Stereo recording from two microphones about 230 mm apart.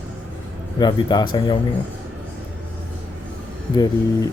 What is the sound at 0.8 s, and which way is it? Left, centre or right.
Speech, centre.